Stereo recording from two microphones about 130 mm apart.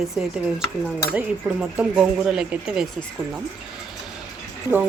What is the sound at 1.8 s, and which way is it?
Speech, 5° right (ahead or behind).